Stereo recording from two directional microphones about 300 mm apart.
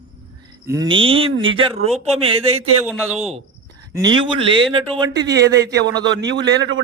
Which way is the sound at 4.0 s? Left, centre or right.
Centre.